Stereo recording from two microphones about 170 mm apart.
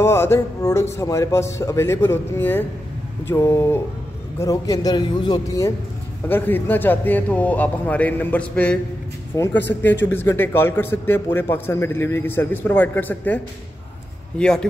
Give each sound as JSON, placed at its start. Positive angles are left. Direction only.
{"t": 0.0, "sound": "a man's voice", "side_deg": 15}
{"t": 6.2, "sound": "a man's voice", "side_deg": 10}
{"t": 14.4, "sound": "a man's voice", "side_deg": 5}